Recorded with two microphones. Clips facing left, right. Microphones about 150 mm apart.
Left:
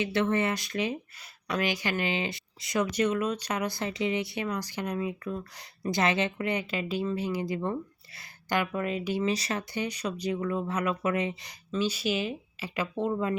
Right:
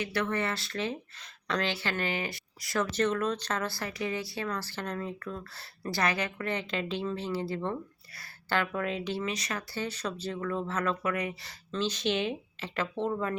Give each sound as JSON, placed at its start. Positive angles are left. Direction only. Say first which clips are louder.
{"t": 0.0, "sound": "speech", "louder": "left 4 dB", "side_deg": 20}
{"t": 9.2, "sound": "speech", "louder": "left 5 dB", "side_deg": 30}
{"t": 9.8, "sound": "speech", "louder": "left 3 dB", "side_deg": 10}
{"t": 11.7, "sound": "speech", "louder": "left 1 dB", "side_deg": 10}